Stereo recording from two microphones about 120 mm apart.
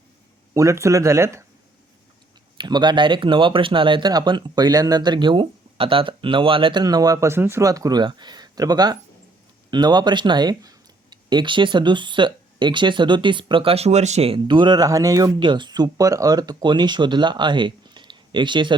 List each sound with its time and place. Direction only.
0.5 s speech: 25° right (ahead or behind)
2.6 s speech: 40° right (ahead or behind)
6.8 s speech: 30° right (ahead or behind); by 14.3 s 65° right (ahead or behind)
14.3 s speech: 40° right (ahead or behind)